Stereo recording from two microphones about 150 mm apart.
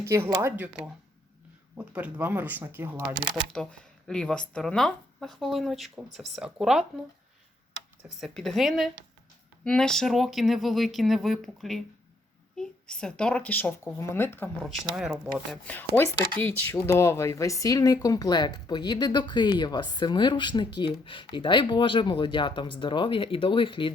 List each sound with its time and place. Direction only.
0.0 s speech: 20° right (ahead or behind)
1.8 s speech: 10° right (ahead or behind)
3.5 s speech: 5° left (ahead or behind)
8.2 s speech: 5° left (ahead or behind)
14.6 s speech: centre (ahead or behind)
15.6 s speech: 10° left (ahead or behind); by 23.9 s 35° left (ahead or behind)